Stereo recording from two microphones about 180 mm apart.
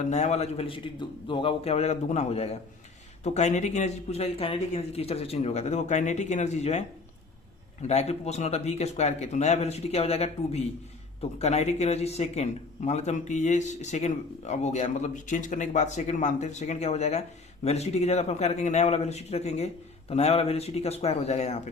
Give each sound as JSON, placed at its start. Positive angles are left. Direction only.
{"t": 0.1, "sound": "speech", "side_deg": 40}